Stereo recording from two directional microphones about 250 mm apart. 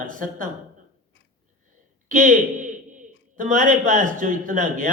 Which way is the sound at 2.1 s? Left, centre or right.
Right.